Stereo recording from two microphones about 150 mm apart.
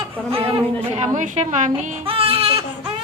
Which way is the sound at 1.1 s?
55° right (ahead or behind).